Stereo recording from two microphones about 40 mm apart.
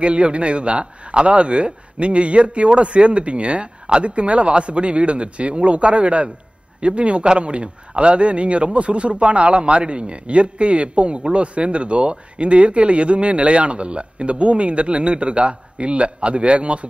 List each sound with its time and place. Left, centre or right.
0.0 s a man's voice: right